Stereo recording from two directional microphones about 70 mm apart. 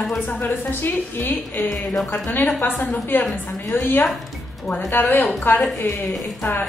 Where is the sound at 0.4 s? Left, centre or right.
Left.